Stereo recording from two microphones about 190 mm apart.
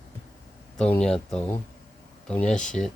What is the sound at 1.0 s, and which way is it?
Speech, 5° left (ahead or behind).